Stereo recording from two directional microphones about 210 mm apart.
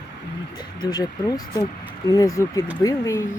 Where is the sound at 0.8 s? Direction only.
20° left (ahead or behind).